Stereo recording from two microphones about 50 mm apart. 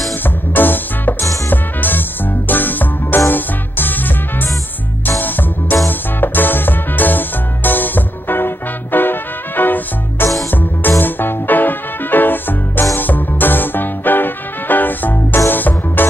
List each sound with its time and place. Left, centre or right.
0.2 s music: left